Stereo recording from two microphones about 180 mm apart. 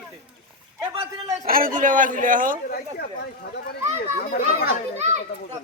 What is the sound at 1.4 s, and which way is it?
Speech, 50° right (ahead or behind).